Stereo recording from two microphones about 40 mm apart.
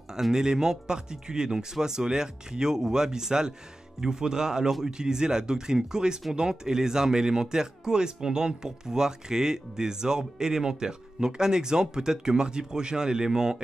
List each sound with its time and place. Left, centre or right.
0.1 s speech: centre